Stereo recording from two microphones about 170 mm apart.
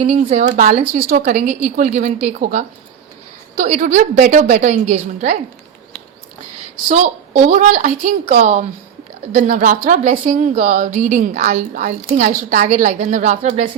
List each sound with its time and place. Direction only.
0.0 s a woman's voice: 40° right (ahead or behind)
6.8 s a woman's voice: 45° right (ahead or behind)
9.5 s a woman's voice: 45° right (ahead or behind)
12.6 s a woman's voice: 40° right (ahead or behind)